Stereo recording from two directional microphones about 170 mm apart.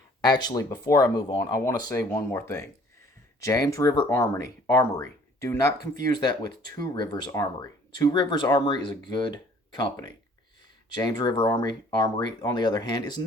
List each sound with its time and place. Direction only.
0.2 s speech: 25° left (ahead or behind)